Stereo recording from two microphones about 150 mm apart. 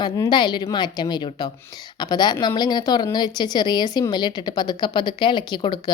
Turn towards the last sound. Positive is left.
turn(degrees=30)  # may be behind; listen again after turning